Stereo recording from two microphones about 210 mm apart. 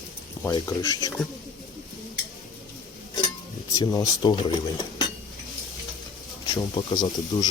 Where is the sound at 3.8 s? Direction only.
20° left (ahead or behind).